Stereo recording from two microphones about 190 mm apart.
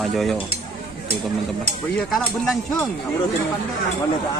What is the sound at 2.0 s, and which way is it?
Speech, centre (ahead or behind).